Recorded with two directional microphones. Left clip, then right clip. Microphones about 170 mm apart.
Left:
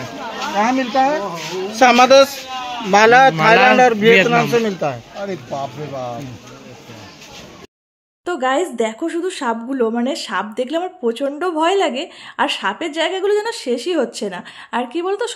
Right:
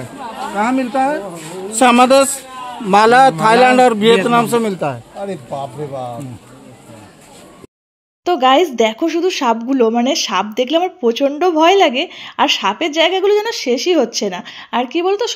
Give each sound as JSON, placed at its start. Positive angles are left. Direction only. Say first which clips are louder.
{"t": 0.6, "sound": "speech", "louder": "even", "side_deg": -90}
{"t": 8.3, "sound": "speech", "louder": "right 7 dB", "side_deg": -15}